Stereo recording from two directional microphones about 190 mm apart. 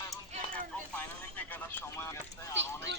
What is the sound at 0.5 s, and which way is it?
Vehicle, 10° left (ahead or behind).